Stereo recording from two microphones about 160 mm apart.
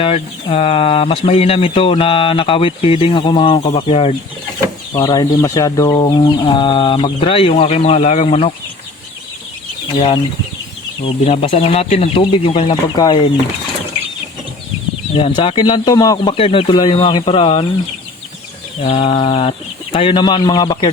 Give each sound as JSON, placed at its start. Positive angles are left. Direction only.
{"t": 0.0, "sound": "speech", "side_deg": 35}
{"t": 3.6, "sound": "speech", "side_deg": 45}
{"t": 3.8, "sound": "speech", "side_deg": 35}
{"t": 4.9, "sound": "speech", "side_deg": 25}
{"t": 11.0, "sound": "speech", "side_deg": 35}
{"t": 15.1, "sound": "speech", "side_deg": 30}
{"t": 16.4, "sound": "speech", "side_deg": 35}
{"t": 18.8, "sound": "speech", "side_deg": 35}